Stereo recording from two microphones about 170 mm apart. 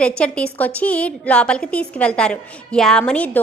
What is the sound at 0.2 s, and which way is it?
A woman's voice, 5° left (ahead or behind).